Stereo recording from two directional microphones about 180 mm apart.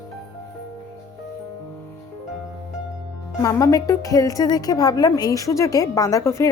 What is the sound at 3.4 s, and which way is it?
A woman's voice, 15° left (ahead or behind).